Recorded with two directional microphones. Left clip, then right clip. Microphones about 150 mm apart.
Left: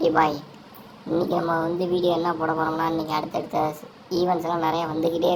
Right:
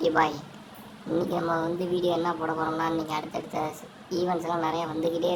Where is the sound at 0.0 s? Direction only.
10° left (ahead or behind).